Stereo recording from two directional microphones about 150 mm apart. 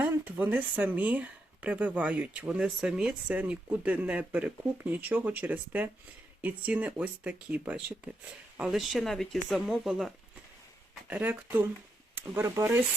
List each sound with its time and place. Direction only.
0.0 s speech: 10° right (ahead or behind)
11.1 s speech: 10° right (ahead or behind)